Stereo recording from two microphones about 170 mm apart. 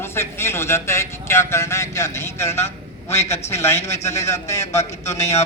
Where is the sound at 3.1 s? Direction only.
40° left (ahead or behind).